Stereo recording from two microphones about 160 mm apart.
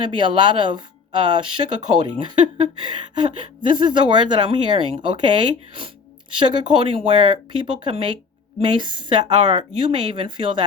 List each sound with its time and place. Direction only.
0.0 s a woman's voice: 30° right (ahead or behind)